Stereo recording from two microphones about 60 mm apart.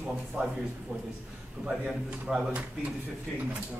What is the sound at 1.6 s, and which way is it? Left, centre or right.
Speech, centre.